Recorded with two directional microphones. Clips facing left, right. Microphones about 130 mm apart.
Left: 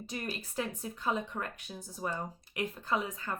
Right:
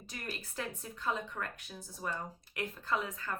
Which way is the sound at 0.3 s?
20° left (ahead or behind).